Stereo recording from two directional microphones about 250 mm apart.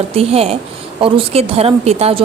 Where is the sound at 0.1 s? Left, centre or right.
Right.